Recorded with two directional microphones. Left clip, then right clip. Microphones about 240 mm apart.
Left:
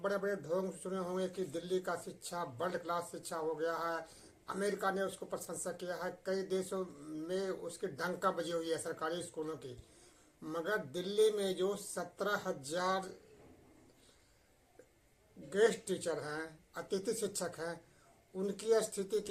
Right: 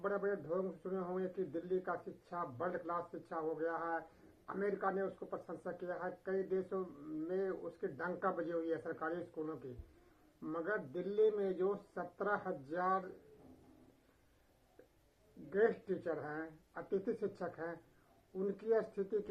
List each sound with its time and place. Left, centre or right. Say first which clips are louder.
0.0 s speech: left 2 dB; centre
15.4 s speech: left 3 dB; centre